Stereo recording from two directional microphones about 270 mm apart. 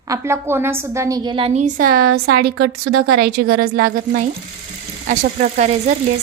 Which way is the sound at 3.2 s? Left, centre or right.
Right.